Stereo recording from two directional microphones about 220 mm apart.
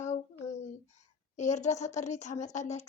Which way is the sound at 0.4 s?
30° left (ahead or behind).